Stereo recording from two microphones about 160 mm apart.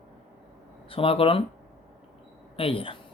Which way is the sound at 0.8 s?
35° left (ahead or behind).